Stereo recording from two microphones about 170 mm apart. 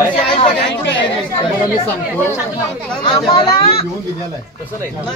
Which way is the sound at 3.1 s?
25° left (ahead or behind).